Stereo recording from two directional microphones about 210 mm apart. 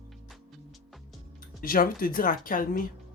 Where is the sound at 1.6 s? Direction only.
45° left (ahead or behind).